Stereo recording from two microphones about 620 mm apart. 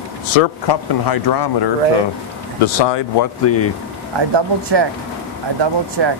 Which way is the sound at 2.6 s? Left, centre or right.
Left.